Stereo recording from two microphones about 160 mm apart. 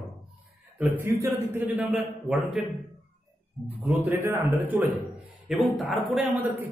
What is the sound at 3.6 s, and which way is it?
A man's voice, 15° right (ahead or behind).